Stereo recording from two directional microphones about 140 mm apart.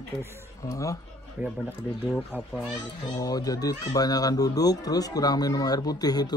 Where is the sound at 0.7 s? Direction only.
25° left (ahead or behind).